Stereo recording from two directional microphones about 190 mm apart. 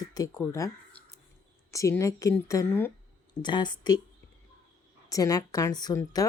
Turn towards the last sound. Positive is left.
turn(degrees=20)  # may be behind; listen again after turning